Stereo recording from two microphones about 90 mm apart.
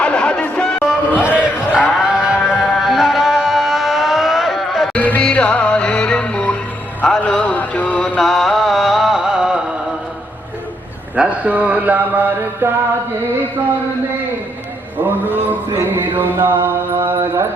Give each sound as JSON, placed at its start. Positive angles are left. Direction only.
{"t": 0.0, "sound": "music", "side_deg": 10}
{"t": 0.9, "sound": "a sound", "side_deg": -15}
{"t": 2.0, "sound": "music", "side_deg": -10}
{"t": 4.9, "sound": "music", "side_deg": 15}
{"t": 8.2, "sound": "music", "side_deg": 0}
{"t": 11.1, "sound": "mantra", "side_deg": -15}
{"t": 16.1, "sound": "mantra", "side_deg": -20}